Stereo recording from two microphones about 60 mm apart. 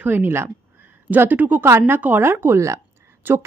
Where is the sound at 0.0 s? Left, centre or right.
Right.